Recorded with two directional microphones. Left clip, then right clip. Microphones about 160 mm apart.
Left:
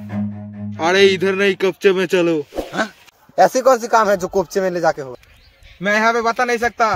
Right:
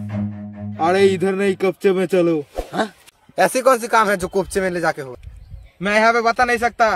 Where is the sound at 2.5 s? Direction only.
5° right (ahead or behind).